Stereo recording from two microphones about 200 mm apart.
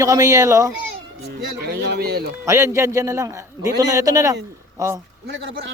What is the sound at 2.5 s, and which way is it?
A man's voice, 15° right (ahead or behind).